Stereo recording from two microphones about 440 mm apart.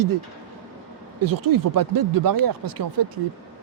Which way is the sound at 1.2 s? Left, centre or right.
Right.